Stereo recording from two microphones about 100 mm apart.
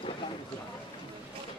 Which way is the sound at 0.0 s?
65° left (ahead or behind).